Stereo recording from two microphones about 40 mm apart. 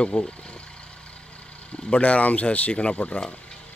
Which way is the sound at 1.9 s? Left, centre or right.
Left.